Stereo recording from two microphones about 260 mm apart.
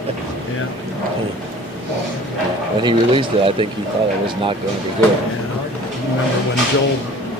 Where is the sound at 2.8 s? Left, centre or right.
Centre.